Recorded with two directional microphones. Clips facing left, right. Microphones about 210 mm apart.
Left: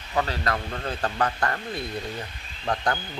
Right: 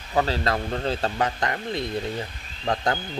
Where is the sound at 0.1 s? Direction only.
30° right (ahead or behind).